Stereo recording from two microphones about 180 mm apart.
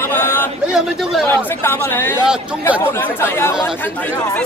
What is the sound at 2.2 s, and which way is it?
Speech, 5° right (ahead or behind).